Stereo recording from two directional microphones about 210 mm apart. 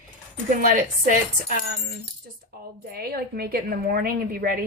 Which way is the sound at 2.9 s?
45° right (ahead or behind).